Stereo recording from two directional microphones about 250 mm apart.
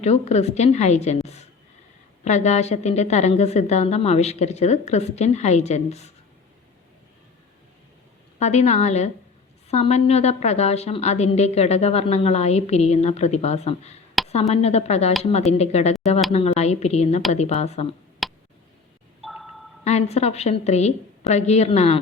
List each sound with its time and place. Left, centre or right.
0.0 s a woman's voice: left
8.4 s a woman's voice: left
14.2 s a sound: centre
14.5 s a woman's voice: left
18.2 s tick: centre
19.2 s a sound: centre
19.8 s a woman's voice: left